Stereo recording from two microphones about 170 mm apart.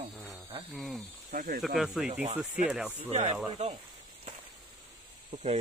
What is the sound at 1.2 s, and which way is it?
Speech, 50° right (ahead or behind).